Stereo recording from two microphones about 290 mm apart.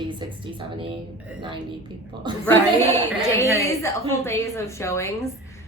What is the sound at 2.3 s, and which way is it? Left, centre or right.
Speech, centre.